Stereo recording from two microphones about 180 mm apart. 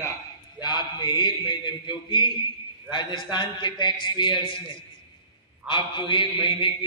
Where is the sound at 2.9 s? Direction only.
25° left (ahead or behind).